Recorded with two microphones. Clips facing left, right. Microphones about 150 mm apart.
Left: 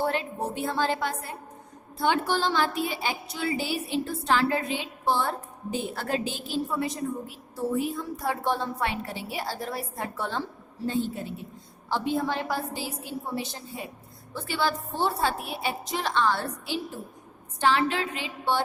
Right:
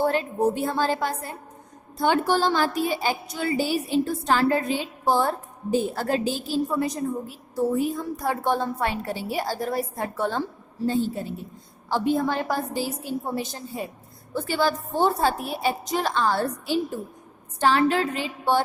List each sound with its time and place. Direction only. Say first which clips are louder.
0.0 s a woman's voice: right 6 dB; 40° right (ahead or behind)